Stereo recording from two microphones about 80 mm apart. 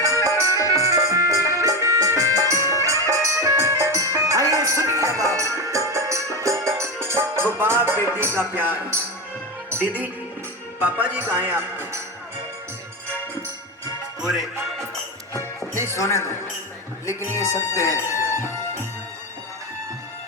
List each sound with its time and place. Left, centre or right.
0.2 s music: left
0.7 s music: right
8.0 s a man's voice: right
10.8 s a man's voice: right
14.2 s music: centre
15.7 s speech: right
16.0 s a man's voice: left
17.3 s speech: left